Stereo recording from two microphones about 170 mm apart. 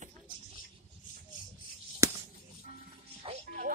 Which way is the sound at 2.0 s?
20° right (ahead or behind).